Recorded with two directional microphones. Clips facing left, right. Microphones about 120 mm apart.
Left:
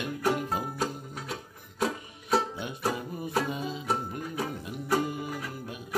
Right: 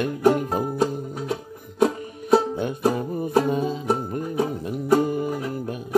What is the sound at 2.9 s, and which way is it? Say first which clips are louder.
Music: right 9 dB; 40° right (ahead or behind).